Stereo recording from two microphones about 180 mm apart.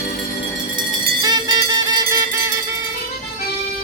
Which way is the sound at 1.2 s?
20° right (ahead or behind).